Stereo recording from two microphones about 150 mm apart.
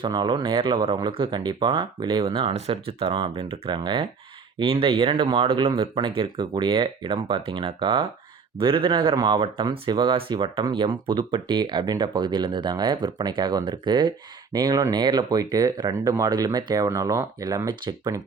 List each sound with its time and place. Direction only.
0.0 s speech: 30° right (ahead or behind)